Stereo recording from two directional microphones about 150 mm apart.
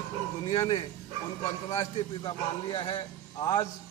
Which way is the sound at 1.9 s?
30° left (ahead or behind).